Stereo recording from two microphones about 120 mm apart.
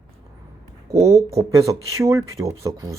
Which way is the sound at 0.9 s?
25° right (ahead or behind).